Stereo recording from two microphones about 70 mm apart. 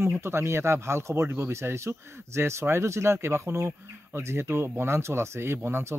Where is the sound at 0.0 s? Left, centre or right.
Right.